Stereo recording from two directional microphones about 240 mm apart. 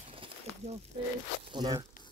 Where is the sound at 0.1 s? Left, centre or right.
Right.